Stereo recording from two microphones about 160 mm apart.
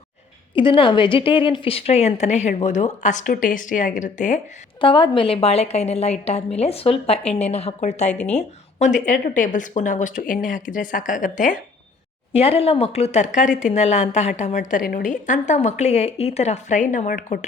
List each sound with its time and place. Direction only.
0.5 s speech: 30° left (ahead or behind); by 4.4 s 50° left (ahead or behind)
4.8 s a woman's voice: 30° left (ahead or behind); by 11.5 s 55° left (ahead or behind)
12.3 s speech: 40° left (ahead or behind); by 17.4 s 55° left (ahead or behind)